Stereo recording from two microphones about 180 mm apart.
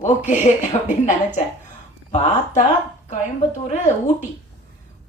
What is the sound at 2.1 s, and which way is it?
Speech, 40° left (ahead or behind).